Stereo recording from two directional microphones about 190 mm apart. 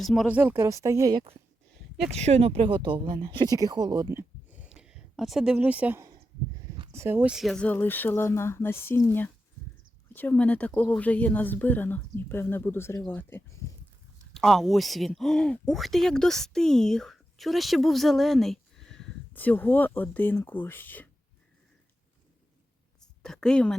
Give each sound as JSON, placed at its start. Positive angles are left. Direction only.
{"t": 0.0, "sound": "speech", "side_deg": 0}
{"t": 2.1, "sound": "speech", "side_deg": -35}
{"t": 4.7, "sound": "a sound", "side_deg": -5}
{"t": 6.9, "sound": "speech", "side_deg": -10}
{"t": 10.1, "sound": "speech", "side_deg": 10}
{"t": 23.0, "sound": "a sound", "side_deg": 5}